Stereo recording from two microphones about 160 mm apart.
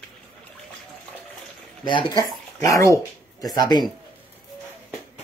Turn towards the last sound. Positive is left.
turn(degrees=25)  # may be behind; listen again after turning